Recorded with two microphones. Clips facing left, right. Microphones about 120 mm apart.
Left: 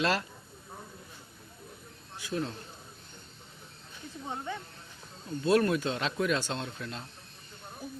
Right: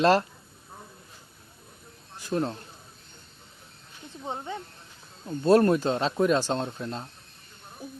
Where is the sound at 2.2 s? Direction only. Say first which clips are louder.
Right 6 dB; 45° right (ahead or behind).